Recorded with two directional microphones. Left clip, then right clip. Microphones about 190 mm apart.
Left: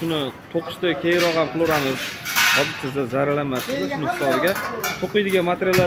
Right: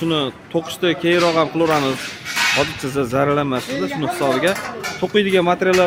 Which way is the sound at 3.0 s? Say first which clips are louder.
Right 4 dB; 30° right (ahead or behind).